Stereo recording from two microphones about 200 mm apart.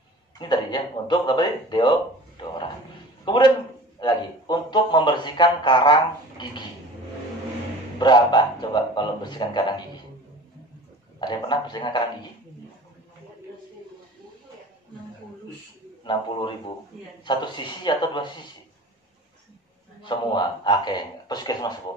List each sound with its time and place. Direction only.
0.4 s speech: 20° left (ahead or behind)
8.0 s speech: 20° left (ahead or behind)
11.1 s speech: 20° left (ahead or behind)
16.0 s speech: 25° left (ahead or behind)
20.0 s speech: 25° left (ahead or behind)